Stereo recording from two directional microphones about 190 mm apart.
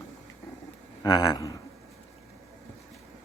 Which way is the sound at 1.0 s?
20° left (ahead or behind).